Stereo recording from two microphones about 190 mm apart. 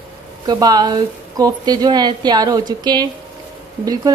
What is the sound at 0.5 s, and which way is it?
A woman's voice, 20° right (ahead or behind).